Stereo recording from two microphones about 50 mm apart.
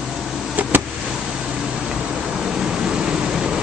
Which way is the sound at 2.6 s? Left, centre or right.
Centre.